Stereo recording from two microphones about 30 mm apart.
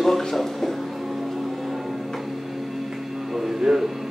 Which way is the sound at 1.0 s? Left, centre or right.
Centre.